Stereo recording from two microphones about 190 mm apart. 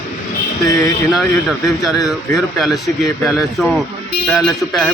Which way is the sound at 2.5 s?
Centre (ahead or behind).